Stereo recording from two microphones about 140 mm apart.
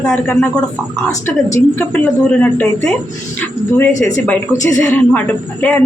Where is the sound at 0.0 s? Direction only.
5° left (ahead or behind).